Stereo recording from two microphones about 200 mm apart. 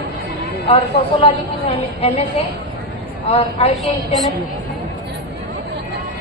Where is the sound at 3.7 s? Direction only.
Centre (ahead or behind).